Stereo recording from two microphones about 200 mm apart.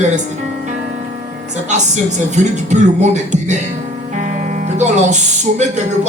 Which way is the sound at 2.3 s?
35° right (ahead or behind).